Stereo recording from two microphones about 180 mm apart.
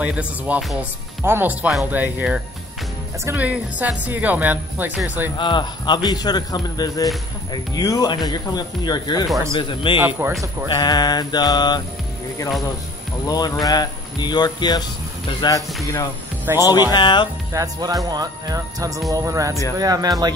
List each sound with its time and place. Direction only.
0.0 s speech: 5° right (ahead or behind)
5.4 s speech: 25° left (ahead or behind)
9.9 s speech: 10° right (ahead or behind)
10.7 s speech: 20° left (ahead or behind)
13.3 s speech: 20° left (ahead or behind)
16.5 s speech: 15° right (ahead or behind)
16.9 s speech: 25° left (ahead or behind)
17.5 s speech: 20° right (ahead or behind)